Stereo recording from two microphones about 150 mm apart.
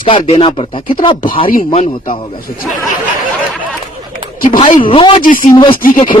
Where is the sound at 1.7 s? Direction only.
45° left (ahead or behind).